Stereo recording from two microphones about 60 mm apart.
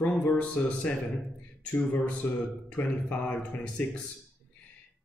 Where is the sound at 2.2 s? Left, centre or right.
Left.